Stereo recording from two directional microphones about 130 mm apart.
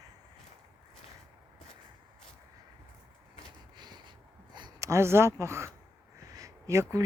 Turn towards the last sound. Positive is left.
turn(degrees=-25)  # may be behind; listen again after turning